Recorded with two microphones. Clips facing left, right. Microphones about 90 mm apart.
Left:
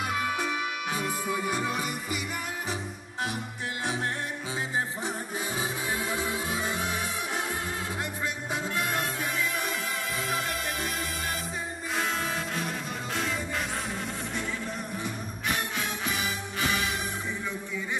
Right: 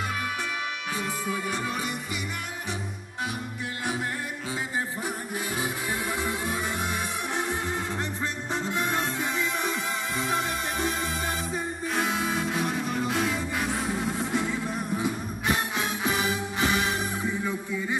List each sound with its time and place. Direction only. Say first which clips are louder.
0.9 s music: even; 10° left (ahead or behind)
5.6 s music: even; 20° left (ahead or behind)
8.7 s salsa music: right 3 dB; 25° right (ahead or behind)
10.3 s music: right 4 dB; 30° right (ahead or behind)
11.9 s music: right 2 dB; 5° right (ahead or behind)
15.4 s music: right 3 dB; 25° right (ahead or behind)